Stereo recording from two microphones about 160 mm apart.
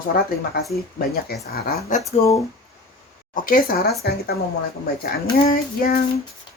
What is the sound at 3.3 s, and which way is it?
Child singing, 60° left (ahead or behind).